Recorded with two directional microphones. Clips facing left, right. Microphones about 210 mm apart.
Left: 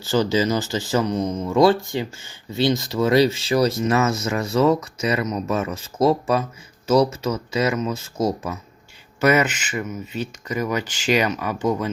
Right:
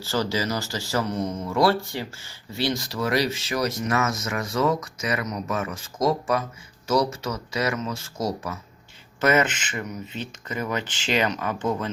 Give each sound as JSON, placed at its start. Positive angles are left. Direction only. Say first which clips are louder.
{"t": 0.0, "sound": "speech", "louder": "left 6 dB", "side_deg": 20}
{"t": 9.2, "sound": "speech", "louder": "left 3 dB", "side_deg": 10}